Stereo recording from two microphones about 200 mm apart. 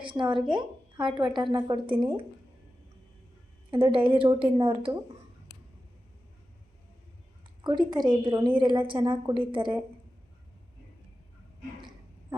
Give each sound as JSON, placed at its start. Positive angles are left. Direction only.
{"t": 0.0, "sound": "a woman's voice", "side_deg": -25}
{"t": 3.7, "sound": "a woman's voice", "side_deg": -25}
{"t": 7.6, "sound": "a woman's voice", "side_deg": -20}